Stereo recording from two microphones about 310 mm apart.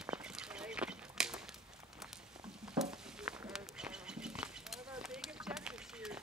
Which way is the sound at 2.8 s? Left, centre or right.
Centre.